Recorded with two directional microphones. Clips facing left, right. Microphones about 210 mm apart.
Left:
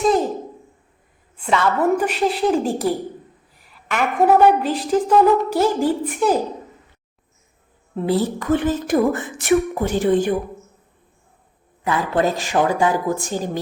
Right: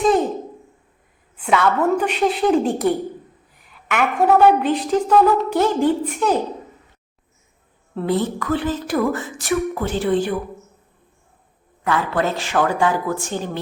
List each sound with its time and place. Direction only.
0.0 s a sound: centre (ahead or behind)
1.5 s a woman's voice: centre (ahead or behind)
4.2 s a woman's voice: 10° left (ahead or behind)
8.0 s a woman's voice: 30° left (ahead or behind)
9.0 s a woman's voice: 20° left (ahead or behind)
11.8 s a man's voice: 20° left (ahead or behind)
12.2 s a woman's voice: 40° left (ahead or behind)
12.8 s a woman's voice: 15° left (ahead or behind)
13.2 s a woman's voice: 40° left (ahead or behind)